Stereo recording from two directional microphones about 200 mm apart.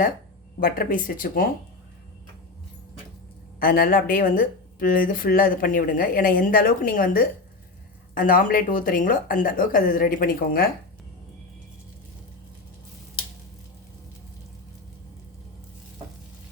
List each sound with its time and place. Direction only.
0.6 s speech: 45° left (ahead or behind)
3.6 s speech: 45° left (ahead or behind)